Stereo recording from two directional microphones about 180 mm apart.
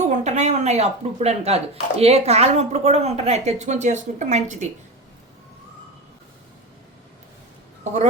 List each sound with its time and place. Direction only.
0.0 s speech: 40° right (ahead or behind)